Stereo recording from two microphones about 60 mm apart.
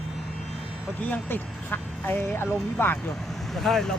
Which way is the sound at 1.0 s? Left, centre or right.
Left.